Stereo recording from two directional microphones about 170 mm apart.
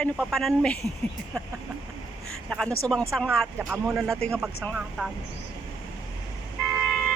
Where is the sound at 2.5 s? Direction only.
5° left (ahead or behind).